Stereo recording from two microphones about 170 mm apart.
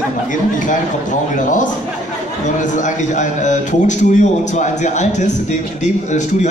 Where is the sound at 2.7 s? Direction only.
45° left (ahead or behind).